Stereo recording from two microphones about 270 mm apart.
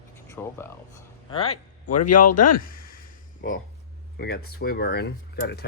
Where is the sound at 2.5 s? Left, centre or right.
Left.